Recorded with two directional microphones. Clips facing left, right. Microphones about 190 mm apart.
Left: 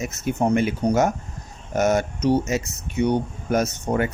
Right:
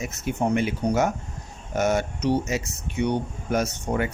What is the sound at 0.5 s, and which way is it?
Speech, 45° left (ahead or behind).